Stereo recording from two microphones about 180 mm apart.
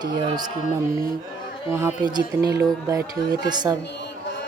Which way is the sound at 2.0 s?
20° right (ahead or behind).